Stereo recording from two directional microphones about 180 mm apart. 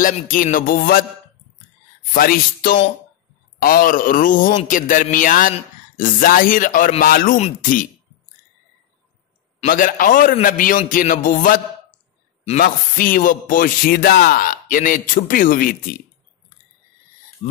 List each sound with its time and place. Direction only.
0.0 s speech: 50° left (ahead or behind)
2.1 s a man's voice: 55° left (ahead or behind)
7.3 s speech: 35° left (ahead or behind)
9.6 s speech: 50° left (ahead or behind)